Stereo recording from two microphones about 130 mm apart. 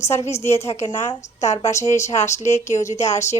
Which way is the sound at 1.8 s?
60° left (ahead or behind).